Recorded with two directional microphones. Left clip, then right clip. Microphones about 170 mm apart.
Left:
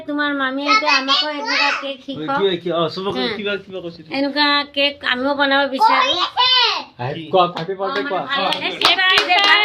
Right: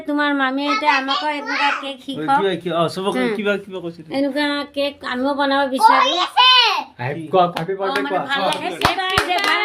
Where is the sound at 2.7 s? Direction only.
30° right (ahead or behind).